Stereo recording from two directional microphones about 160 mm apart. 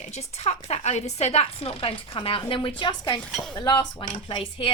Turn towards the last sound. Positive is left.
turn(degrees=30)  # may be behind; listen again after turning